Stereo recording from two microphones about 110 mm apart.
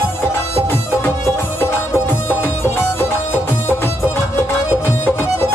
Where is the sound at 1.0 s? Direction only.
20° left (ahead or behind).